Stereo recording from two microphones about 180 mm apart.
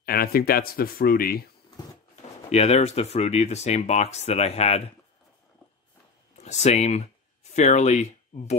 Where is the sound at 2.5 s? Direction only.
35° left (ahead or behind).